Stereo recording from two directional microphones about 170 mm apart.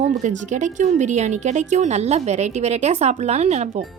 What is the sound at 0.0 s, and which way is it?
A woman's voice, 45° right (ahead or behind).